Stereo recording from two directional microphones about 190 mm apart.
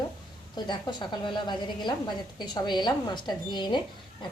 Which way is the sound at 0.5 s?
25° left (ahead or behind).